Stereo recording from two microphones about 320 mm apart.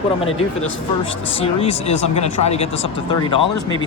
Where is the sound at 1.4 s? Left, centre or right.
Centre.